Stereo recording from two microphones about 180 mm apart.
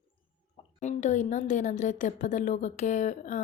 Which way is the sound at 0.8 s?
40° left (ahead or behind).